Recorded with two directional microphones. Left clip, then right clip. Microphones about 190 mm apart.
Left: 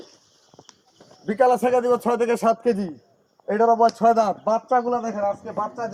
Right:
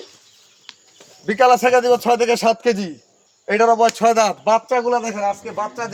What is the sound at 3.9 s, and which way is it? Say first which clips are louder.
Speech: right 3 dB; 55° right (ahead or behind).